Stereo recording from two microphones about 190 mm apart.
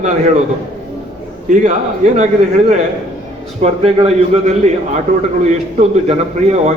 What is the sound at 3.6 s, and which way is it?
A man's voice, 35° right (ahead or behind).